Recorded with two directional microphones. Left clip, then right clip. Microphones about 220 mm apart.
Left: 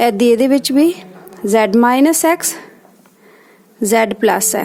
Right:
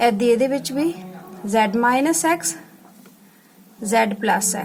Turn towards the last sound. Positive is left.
turn(degrees=50)  # may be behind; listen again after turning